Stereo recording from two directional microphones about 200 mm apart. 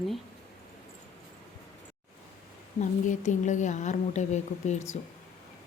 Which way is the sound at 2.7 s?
35° left (ahead or behind).